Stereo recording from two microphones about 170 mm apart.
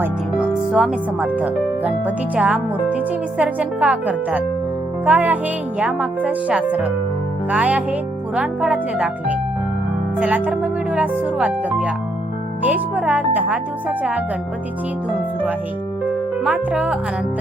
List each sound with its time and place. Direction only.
0.0 s speech: 5° right (ahead or behind)
16.0 s music: 10° right (ahead or behind)